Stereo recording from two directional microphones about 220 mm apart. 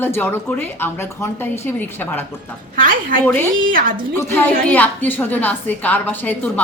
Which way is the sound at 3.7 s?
40° right (ahead or behind).